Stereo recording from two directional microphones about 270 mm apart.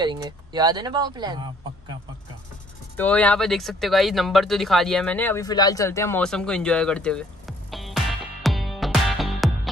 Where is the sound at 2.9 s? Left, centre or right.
Centre.